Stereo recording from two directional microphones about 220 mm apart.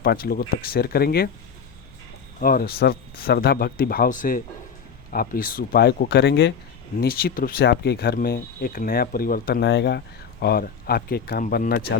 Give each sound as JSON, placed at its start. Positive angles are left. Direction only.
{"t": 0.0, "sound": "speech", "side_deg": 45}
{"t": 2.4, "sound": "speech", "side_deg": 40}